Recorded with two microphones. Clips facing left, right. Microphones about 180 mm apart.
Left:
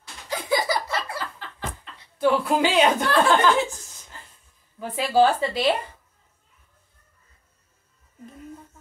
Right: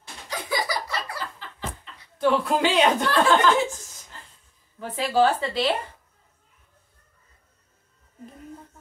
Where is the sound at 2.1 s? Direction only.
5° left (ahead or behind).